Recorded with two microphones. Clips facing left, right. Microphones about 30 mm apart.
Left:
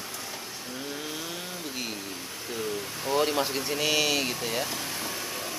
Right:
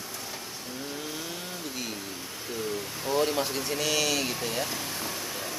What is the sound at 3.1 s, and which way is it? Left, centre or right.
Speech, centre.